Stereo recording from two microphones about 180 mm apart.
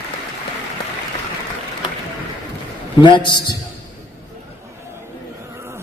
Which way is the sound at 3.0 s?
25° left (ahead or behind).